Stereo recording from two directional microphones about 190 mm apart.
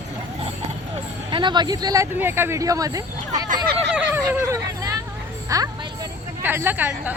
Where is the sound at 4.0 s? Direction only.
10° right (ahead or behind).